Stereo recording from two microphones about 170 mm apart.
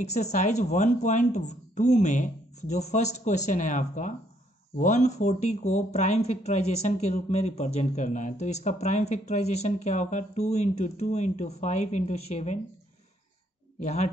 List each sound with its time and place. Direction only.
0.0 s speech: 40° left (ahead or behind)
13.7 s speech: 45° left (ahead or behind)